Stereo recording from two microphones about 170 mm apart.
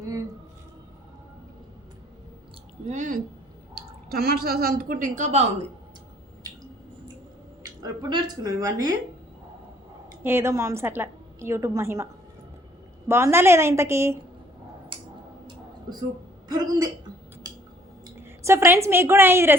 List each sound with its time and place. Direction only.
2.9 s speech: 45° right (ahead or behind)
3.8 s speech: 65° right (ahead or behind); by 5.5 s 45° right (ahead or behind)
7.8 s a woman's voice: 20° right (ahead or behind)
10.2 s a woman's voice: 15° right (ahead or behind)
13.1 s a woman's voice: 15° right (ahead or behind)
14.9 s a sound: 30° right (ahead or behind)
16.5 s a woman's voice: 25° right (ahead or behind)
18.0 s a woman's voice: 15° right (ahead or behind)